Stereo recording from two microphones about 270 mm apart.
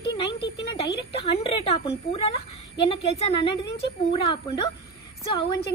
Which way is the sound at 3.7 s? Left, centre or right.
Centre.